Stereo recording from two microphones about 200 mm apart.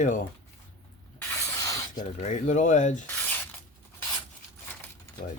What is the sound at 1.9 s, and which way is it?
Speech, 35° left (ahead or behind).